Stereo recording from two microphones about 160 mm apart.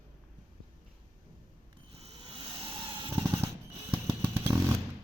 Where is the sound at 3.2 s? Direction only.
15° right (ahead or behind).